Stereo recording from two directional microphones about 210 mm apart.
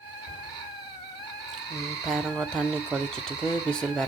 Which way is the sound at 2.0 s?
Centre (ahead or behind).